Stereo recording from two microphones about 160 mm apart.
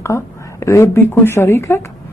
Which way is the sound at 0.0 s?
20° left (ahead or behind).